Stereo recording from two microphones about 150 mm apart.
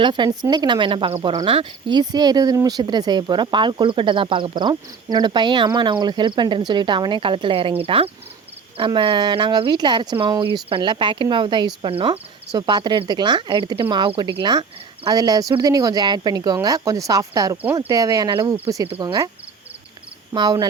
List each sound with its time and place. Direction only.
0.0 s speech: 30° right (ahead or behind)
20.3 s speech: 30° right (ahead or behind)